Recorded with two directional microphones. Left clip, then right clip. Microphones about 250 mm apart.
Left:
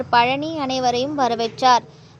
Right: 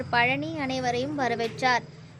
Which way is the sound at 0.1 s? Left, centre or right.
Left.